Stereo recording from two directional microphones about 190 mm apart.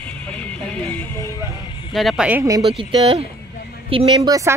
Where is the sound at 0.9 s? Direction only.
10° left (ahead or behind).